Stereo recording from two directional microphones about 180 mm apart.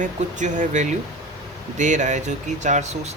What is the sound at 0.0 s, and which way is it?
Speech, 45° right (ahead or behind).